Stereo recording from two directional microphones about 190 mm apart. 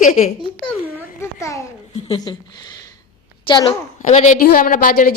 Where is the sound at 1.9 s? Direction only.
35° left (ahead or behind).